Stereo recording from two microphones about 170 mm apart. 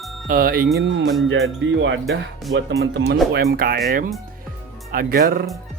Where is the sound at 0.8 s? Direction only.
85° right.